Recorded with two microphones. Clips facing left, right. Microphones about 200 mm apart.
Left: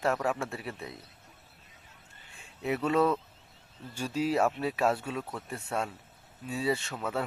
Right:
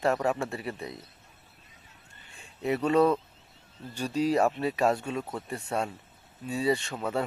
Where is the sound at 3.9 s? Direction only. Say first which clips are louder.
Right 2 dB; 40° right (ahead or behind).